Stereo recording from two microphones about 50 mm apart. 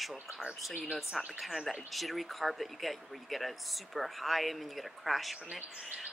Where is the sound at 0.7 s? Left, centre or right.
Centre.